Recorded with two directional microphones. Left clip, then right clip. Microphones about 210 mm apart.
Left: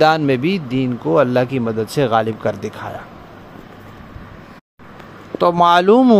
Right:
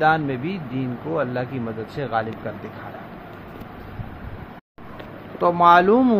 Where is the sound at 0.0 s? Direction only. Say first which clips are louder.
Left 6 dB; 55° left (ahead or behind).